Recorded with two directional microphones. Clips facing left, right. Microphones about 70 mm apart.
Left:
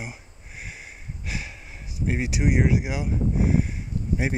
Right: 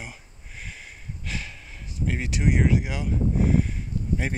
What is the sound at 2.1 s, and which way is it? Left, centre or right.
Speech, centre.